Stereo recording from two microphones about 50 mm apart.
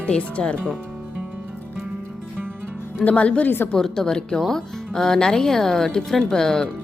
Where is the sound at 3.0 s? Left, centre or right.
Left.